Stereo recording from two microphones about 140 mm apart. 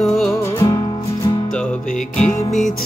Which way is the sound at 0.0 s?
Centre (ahead or behind).